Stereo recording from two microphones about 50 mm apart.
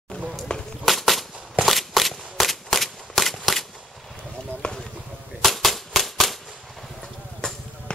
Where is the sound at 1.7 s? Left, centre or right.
Centre.